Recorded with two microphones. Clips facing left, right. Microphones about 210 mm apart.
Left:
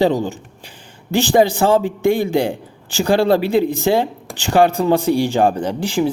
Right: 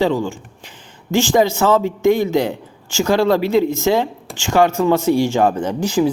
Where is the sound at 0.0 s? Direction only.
40° left (ahead or behind).